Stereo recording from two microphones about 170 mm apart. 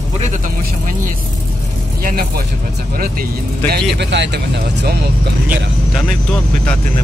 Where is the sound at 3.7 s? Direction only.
90° right; by 5.0 s 70° right (ahead or behind).